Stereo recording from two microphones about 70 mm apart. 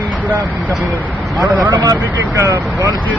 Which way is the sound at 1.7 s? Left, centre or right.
Right.